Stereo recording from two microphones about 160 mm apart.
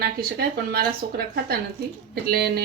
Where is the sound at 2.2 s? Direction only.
75° right (ahead or behind).